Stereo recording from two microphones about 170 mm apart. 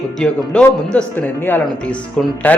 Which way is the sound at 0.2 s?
5° left (ahead or behind).